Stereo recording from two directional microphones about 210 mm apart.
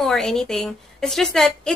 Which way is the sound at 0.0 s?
Centre (ahead or behind).